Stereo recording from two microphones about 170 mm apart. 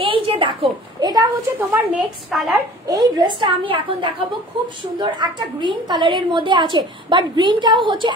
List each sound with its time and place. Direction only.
0.0 s a woman's voice: 30° right (ahead or behind)
2.3 s a woman's voice: centre (ahead or behind)
2.9 s a woman's voice: 25° right (ahead or behind)